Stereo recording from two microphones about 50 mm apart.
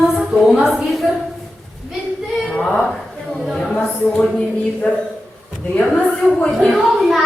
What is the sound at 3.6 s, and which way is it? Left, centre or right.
A woman's voice, centre.